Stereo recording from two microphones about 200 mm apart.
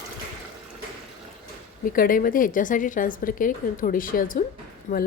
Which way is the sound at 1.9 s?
45° left (ahead or behind).